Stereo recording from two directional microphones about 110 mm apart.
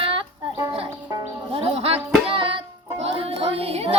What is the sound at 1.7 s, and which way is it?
Music, 65° right (ahead or behind).